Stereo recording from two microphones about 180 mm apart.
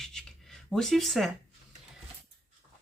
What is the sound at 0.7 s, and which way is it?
Speech, centre (ahead or behind).